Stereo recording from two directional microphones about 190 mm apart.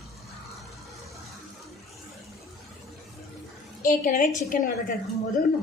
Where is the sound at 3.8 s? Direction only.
45° left (ahead or behind).